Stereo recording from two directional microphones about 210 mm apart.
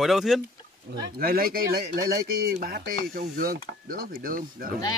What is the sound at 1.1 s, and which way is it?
Speech, 45° right (ahead or behind).